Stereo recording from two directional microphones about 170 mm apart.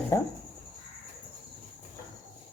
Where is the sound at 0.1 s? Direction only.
15° left (ahead or behind).